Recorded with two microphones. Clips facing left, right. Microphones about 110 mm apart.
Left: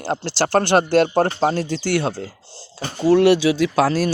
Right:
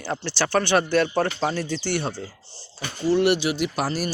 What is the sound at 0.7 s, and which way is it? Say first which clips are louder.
Speech: left 5 dB; 40° left (ahead or behind).